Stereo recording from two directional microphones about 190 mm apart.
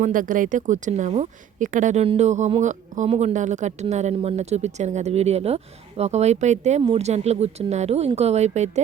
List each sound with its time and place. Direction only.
0.0 s a woman's voice: 45° right (ahead or behind)